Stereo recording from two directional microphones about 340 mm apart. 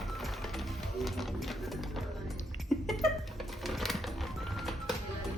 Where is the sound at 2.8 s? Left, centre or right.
Centre.